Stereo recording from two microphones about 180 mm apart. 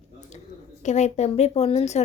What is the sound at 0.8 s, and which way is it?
A woman's voice, 40° left (ahead or behind).